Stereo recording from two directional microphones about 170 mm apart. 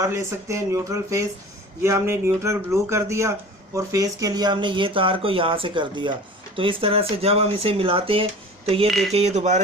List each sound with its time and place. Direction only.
0.0 s a man's voice: 15° right (ahead or behind); by 8.9 s 35° right (ahead or behind)
8.9 s speech: centre (ahead or behind)
9.1 s speech: 40° right (ahead or behind)